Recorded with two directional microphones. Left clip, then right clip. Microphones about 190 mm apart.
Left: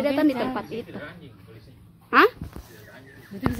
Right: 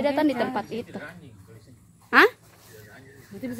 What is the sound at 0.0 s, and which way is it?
Speech, 60° right (ahead or behind).